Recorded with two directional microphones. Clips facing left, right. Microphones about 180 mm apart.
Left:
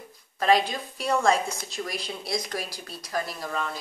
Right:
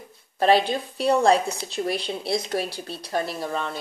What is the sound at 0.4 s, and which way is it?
A woman's voice, 30° right (ahead or behind).